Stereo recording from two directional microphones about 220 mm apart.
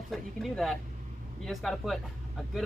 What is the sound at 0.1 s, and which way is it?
Speech, centre (ahead or behind).